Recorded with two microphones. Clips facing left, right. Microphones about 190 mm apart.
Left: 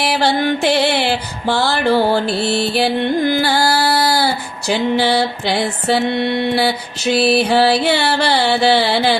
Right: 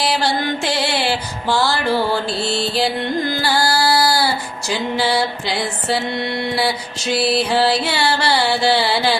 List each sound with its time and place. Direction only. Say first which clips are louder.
0.0 s music: left 3 dB; 60° left (ahead or behind)
3.4 s female singing: left 2 dB; 60° left (ahead or behind)
4.7 s music: left 4 dB; 60° left (ahead or behind)